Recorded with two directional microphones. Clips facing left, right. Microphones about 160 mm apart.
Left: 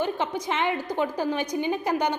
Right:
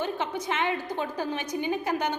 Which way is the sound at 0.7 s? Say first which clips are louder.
Left 4 dB; 20° left (ahead or behind).